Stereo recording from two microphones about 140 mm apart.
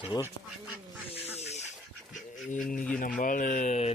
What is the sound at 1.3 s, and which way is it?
Dog, 50° left (ahead or behind).